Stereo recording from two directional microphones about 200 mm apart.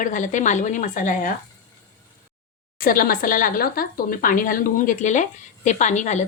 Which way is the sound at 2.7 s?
45° left (ahead or behind).